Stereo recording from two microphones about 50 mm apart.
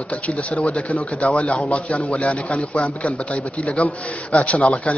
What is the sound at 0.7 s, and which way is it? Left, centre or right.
A man's voice, left.